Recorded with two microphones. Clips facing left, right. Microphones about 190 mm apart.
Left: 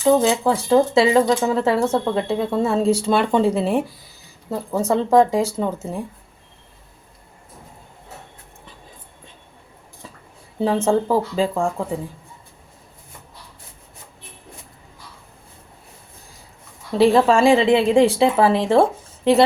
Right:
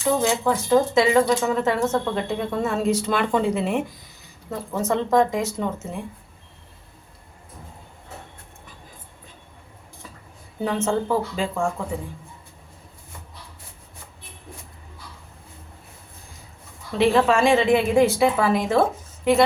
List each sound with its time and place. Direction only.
0.2 s a woman's voice: 30° left (ahead or behind)
10.6 s a woman's voice: 30° left (ahead or behind)
17.0 s a woman's voice: 35° left (ahead or behind)